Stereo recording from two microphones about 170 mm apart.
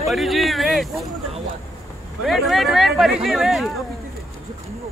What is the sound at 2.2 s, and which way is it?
A man's voice, centre (ahead or behind).